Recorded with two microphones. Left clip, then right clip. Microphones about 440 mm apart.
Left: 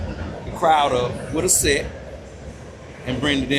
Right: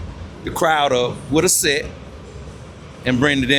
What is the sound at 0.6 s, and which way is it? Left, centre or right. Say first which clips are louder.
Speech: right 1 dB; right.